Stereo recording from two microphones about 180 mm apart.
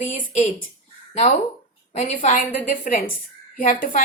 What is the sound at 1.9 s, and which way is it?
A woman's voice, 40° left (ahead or behind).